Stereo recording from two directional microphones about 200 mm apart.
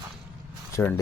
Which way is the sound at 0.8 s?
5° left (ahead or behind).